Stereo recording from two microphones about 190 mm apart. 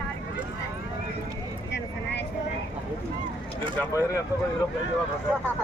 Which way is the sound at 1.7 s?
65° left (ahead or behind).